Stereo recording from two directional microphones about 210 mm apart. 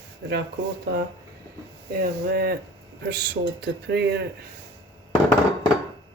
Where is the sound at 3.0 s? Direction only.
50° right (ahead or behind).